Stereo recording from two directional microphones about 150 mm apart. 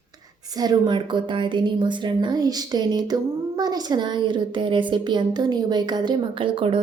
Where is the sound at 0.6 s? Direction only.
30° right (ahead or behind).